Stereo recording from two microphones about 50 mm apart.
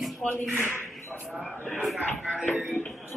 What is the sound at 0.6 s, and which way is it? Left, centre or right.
Speech, left.